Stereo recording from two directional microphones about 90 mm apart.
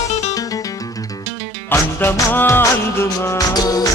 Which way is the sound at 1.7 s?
30° left (ahead or behind).